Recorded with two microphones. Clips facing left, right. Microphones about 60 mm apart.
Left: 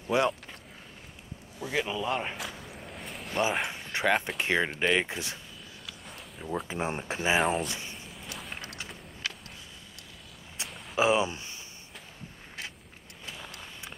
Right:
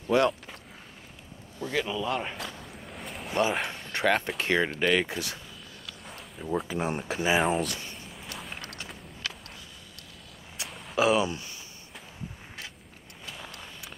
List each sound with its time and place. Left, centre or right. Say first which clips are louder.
0.1 s speech: right 3 dB; centre
1.6 s speech: right 1 dB; centre
2.3 s speech: even; centre; by 5.4 s left
5.9 s a sound: right 2 dB; centre
6.7 s speech: right 2 dB; left
7.3 s speech: right 1 dB; centre
7.6 s speech: right 2 dB; centre
7.9 s a sound: right 1 dB; centre
10.6 s walk: right 1 dB; left
11.0 s speech: right 1 dB; left
13.2 s a sound: right 1 dB; centre